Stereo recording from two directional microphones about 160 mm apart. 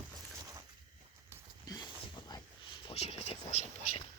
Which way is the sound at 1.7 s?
30° left (ahead or behind).